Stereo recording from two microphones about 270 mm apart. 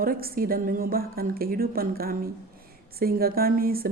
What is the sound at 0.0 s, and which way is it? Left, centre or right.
Speech, right.